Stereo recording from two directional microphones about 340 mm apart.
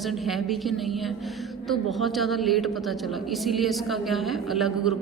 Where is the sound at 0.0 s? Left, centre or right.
Centre.